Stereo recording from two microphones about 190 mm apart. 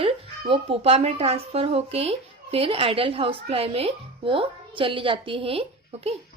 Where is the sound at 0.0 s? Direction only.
30° right (ahead or behind).